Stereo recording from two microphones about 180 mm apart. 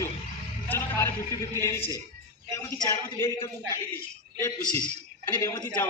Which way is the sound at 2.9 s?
15° left (ahead or behind).